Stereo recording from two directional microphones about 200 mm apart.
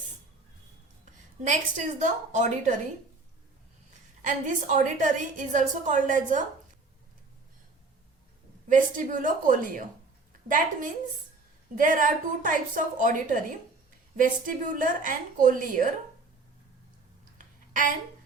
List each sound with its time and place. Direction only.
1.0 s a woman's voice: 40° right (ahead or behind)
4.2 s a woman's voice: 40° right (ahead or behind)
8.7 s a woman's voice: 40° right (ahead or behind)
17.3 s a sound: 40° right (ahead or behind)